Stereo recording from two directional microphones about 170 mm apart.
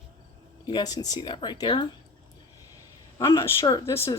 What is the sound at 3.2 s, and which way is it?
Speech, 15° left (ahead or behind).